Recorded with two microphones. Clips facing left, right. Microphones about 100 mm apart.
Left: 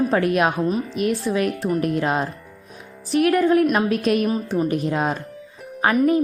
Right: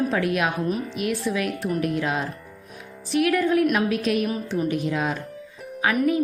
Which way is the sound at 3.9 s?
45° left (ahead or behind).